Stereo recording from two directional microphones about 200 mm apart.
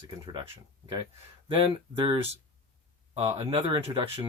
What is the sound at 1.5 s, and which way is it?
Speech, 25° right (ahead or behind).